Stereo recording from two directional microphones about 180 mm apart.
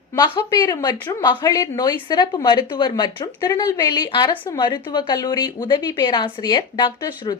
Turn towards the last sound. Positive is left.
turn(degrees=25)  # may be behind; listen again after turning